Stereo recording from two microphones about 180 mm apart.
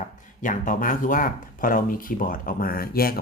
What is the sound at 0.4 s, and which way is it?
Speech, 50° left (ahead or behind).